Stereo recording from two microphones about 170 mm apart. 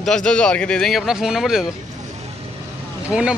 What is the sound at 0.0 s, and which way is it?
Speech, 5° left (ahead or behind).